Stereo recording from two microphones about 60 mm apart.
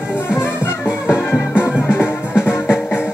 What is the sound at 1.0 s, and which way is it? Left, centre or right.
Music, left.